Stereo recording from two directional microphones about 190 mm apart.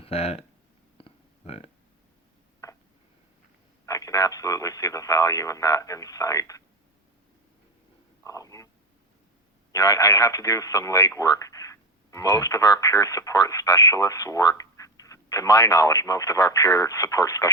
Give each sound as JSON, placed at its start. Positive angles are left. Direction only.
{"t": 0.0, "sound": "speech", "side_deg": 30}
{"t": 0.9, "sound": "a sound", "side_deg": 30}
{"t": 3.8, "sound": "speech", "side_deg": 15}
{"t": 8.2, "sound": "speech", "side_deg": 15}
{"t": 9.7, "sound": "speech", "side_deg": 20}